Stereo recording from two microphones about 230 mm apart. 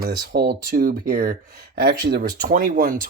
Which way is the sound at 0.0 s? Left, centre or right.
Right.